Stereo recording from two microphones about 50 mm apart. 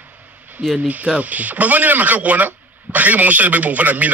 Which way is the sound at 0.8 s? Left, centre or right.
Right.